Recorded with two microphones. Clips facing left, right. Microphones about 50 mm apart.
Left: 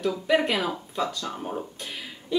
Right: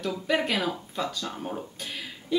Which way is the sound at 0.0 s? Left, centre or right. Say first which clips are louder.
Left 4 dB; centre.